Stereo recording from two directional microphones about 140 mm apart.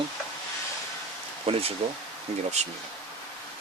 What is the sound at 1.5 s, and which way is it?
Speech, 40° right (ahead or behind).